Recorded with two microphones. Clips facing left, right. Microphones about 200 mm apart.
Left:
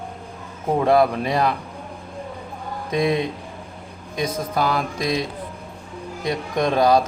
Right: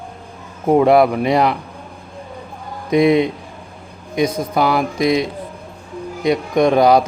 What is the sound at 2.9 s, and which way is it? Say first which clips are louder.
Speech: right 8 dB; 15° right (ahead or behind).